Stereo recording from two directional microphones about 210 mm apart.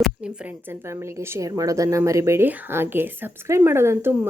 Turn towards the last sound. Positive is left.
turn(degrees=-10)  # may be behind; listen again after turning